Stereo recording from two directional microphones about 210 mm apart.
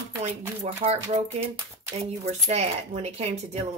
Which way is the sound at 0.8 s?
30° right (ahead or behind).